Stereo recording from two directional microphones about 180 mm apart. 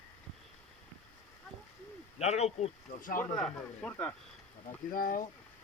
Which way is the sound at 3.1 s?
5° left (ahead or behind).